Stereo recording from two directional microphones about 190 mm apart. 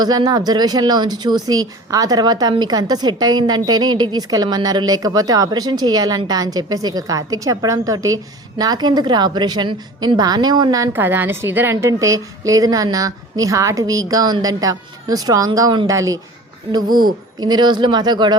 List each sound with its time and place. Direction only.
0.0 s speech: 20° right (ahead or behind)
17.4 s speech: 20° right (ahead or behind)